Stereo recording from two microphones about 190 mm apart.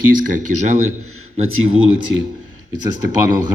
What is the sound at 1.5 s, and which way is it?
Speech, 90° right.